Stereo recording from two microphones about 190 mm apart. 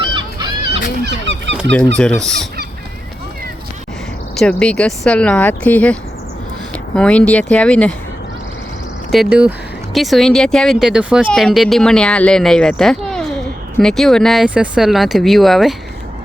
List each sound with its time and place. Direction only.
0.0 s fowl: 25° right (ahead or behind)
2.0 s speech: 5° left (ahead or behind)
4.4 s speech: 5° left (ahead or behind)
9.1 s speech: 5° right (ahead or behind)